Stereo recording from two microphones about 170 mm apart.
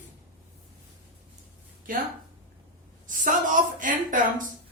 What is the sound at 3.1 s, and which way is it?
A woman's voice, 50° right (ahead or behind).